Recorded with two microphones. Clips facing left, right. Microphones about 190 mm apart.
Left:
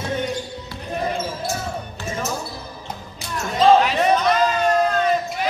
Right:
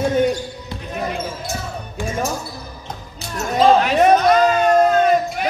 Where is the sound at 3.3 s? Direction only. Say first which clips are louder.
Right 1 dB; 50° right (ahead or behind).